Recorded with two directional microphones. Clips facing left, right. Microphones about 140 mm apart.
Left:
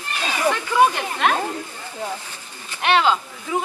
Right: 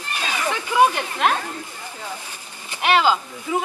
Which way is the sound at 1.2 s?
Centre (ahead or behind).